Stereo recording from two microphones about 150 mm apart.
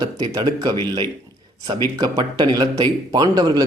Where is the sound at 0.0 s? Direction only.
25° right (ahead or behind).